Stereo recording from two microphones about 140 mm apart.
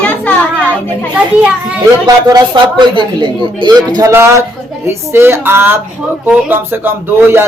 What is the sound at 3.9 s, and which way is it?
Speech, 20° right (ahead or behind).